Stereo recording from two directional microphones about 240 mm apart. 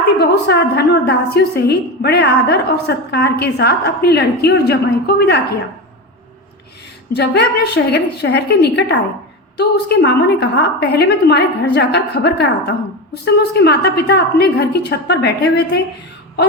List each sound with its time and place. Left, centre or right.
0.2 s a woman's voice: left
7.1 s a woman's voice: left